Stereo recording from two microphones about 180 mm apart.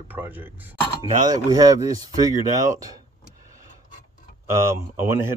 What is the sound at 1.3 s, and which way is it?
Speech, 20° right (ahead or behind).